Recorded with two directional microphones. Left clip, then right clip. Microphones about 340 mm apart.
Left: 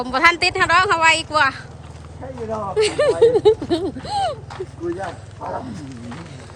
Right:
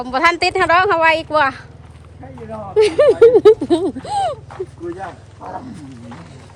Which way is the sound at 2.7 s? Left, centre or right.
Centre.